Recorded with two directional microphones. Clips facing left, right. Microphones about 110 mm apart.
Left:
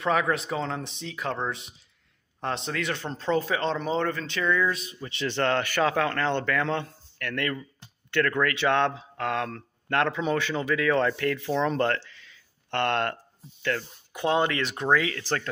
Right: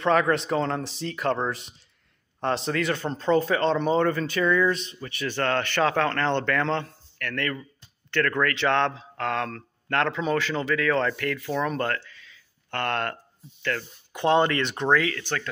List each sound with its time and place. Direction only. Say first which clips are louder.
0.0 s a man's voice: right 3 dB; 5° left (ahead or behind)
5.0 s a man's voice: left 1 dB; 25° left (ahead or behind)
14.1 s a man's voice: right 3 dB; 5° left (ahead or behind)
15.0 s speech: right 1 dB; 20° left (ahead or behind)